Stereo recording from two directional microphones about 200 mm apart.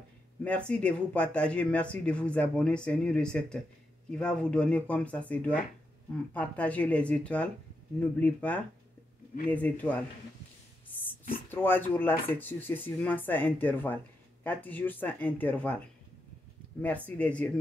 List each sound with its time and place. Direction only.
0.4 s speech: 5° left (ahead or behind)
11.5 s speech: 10° left (ahead or behind)
16.8 s speech: 5° left (ahead or behind)